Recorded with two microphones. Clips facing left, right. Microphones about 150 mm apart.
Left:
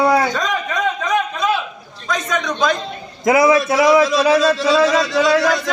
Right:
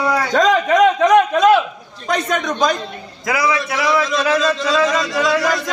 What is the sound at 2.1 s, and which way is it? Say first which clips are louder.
Speech: right 2 dB; 55° right (ahead or behind).